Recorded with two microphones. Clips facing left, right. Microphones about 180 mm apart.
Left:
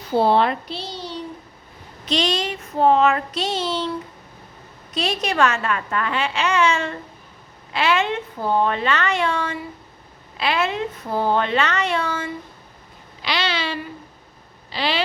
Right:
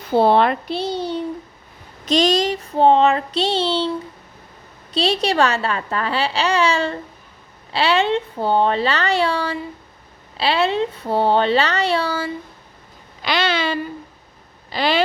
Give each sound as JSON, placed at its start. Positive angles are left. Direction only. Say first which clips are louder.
{"t": 0.2, "sound": "a child's voice", "louder": "right 3 dB", "side_deg": -60}
{"t": 2.0, "sound": "a woman's voice", "louder": "right 6 dB", "side_deg": -40}
{"t": 4.9, "sound": "a woman's voice", "louder": "right 3 dB", "side_deg": -30}
{"t": 13.2, "sound": "a sound", "louder": "right 4 dB", "side_deg": -50}
{"t": 14.7, "sound": "speech", "louder": "right 5 dB", "side_deg": -45}